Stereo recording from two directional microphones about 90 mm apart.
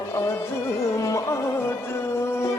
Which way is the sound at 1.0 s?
35° left (ahead or behind).